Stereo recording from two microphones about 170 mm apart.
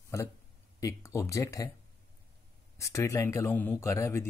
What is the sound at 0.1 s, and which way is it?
Speech, 15° left (ahead or behind).